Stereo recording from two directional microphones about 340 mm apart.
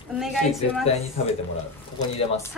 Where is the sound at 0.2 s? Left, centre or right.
Centre.